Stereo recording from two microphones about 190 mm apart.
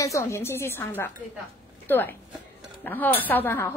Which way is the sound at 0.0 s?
15° left (ahead or behind).